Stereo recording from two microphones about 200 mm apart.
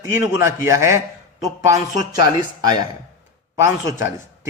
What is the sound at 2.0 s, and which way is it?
A man's voice, 20° right (ahead or behind).